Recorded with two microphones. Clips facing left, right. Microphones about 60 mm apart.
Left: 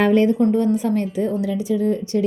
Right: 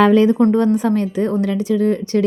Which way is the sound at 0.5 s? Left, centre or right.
Right.